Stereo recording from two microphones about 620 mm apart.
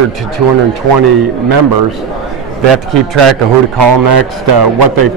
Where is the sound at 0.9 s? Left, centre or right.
Right.